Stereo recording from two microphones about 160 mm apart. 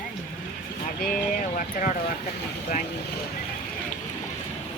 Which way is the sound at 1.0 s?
60° left (ahead or behind).